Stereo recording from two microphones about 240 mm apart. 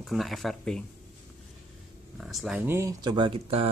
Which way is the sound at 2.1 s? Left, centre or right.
Centre.